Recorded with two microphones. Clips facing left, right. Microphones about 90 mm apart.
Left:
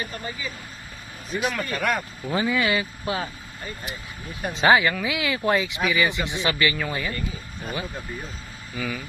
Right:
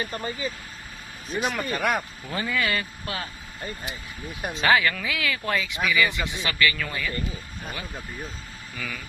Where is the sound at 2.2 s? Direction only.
15° left (ahead or behind).